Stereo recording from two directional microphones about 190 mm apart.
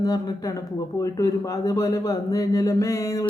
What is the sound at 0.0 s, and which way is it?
A man's voice, 20° left (ahead or behind).